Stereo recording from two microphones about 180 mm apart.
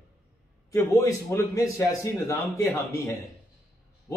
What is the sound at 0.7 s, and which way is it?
A man's voice, 15° left (ahead or behind).